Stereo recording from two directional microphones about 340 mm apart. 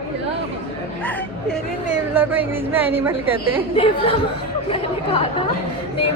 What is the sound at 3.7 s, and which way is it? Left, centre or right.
Speech, centre.